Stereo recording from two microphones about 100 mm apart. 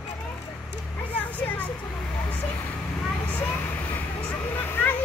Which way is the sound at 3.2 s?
20° left (ahead or behind).